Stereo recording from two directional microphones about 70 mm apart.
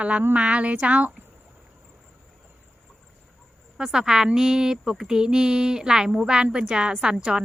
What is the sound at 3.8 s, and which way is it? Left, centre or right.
Speech, centre.